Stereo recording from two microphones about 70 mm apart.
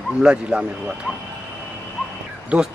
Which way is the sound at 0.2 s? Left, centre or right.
Centre.